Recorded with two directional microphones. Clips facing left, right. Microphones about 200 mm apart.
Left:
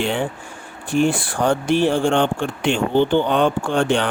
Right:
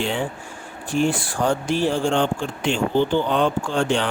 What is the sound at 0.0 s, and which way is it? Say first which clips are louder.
Speech: left 3 dB; 60° left (ahead or behind).